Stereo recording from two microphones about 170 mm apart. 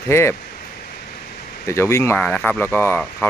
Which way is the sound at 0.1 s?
15° left (ahead or behind).